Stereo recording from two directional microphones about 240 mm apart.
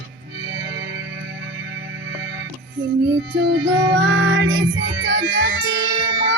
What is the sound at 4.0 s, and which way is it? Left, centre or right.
Music, right.